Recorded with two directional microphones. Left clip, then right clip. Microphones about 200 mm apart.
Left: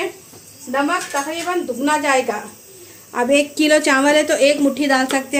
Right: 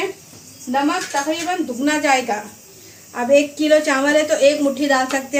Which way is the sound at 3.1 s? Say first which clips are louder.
Right 1 dB; 50° left (ahead or behind).